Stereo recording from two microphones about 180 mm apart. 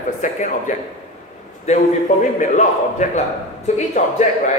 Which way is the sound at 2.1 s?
40° left (ahead or behind).